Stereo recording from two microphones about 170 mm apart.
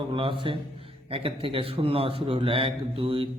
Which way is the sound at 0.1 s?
30° right (ahead or behind).